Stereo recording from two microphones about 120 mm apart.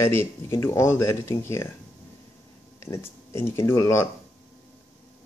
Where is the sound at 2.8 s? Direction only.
25° left (ahead or behind).